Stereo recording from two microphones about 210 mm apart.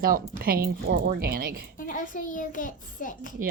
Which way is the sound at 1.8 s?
40° left (ahead or behind).